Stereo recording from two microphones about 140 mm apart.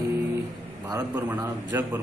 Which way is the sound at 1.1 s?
10° right (ahead or behind).